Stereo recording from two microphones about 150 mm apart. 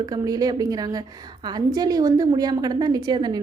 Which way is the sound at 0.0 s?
25° right (ahead or behind).